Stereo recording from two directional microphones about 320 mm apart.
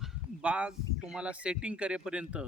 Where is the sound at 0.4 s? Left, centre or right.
Centre.